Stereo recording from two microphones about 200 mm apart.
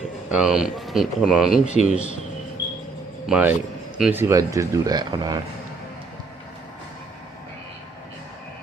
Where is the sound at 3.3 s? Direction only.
5° right (ahead or behind).